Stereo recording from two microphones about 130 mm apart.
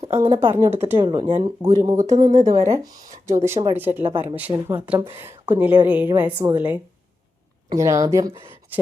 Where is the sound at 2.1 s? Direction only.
60° right (ahead or behind).